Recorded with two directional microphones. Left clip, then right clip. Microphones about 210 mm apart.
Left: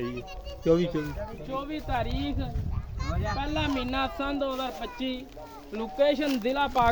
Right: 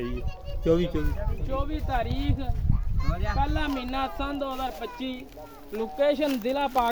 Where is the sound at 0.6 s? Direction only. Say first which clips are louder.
Even; 5° right (ahead or behind).